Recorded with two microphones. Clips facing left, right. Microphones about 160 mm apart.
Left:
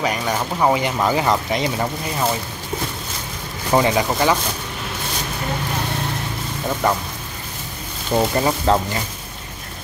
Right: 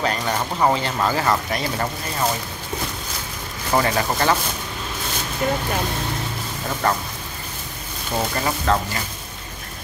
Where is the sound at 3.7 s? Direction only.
15° left (ahead or behind).